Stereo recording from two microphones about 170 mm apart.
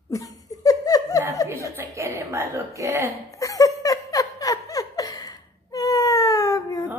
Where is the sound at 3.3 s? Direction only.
20° left (ahead or behind).